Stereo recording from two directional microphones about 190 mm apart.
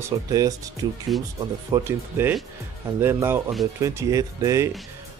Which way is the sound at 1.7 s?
10° right (ahead or behind).